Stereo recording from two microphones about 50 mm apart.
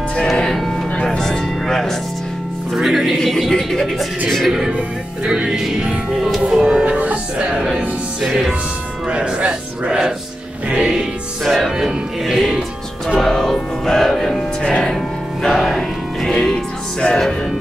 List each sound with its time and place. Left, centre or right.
0.4 s music: centre
2.7 s music: centre
4.3 s speech: centre
4.7 s music: centre
9.1 s music: right
11.4 s music: centre
11.7 s music: centre
13.2 s music: centre
15.4 s music: centre
16.3 s music: centre